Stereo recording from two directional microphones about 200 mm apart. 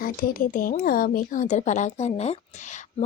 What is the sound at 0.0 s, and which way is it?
Speech, 45° left (ahead or behind).